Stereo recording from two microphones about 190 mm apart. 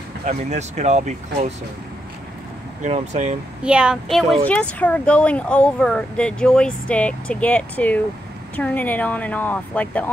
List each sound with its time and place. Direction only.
0.2 s speech: 35° right (ahead or behind)
2.8 s speech: 35° right (ahead or behind)
3.6 s speech: 5° right (ahead or behind)